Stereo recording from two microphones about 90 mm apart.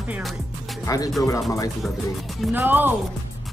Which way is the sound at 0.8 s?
40° left (ahead or behind).